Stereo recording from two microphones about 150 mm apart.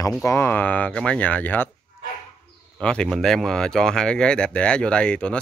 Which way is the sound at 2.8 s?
5° left (ahead or behind).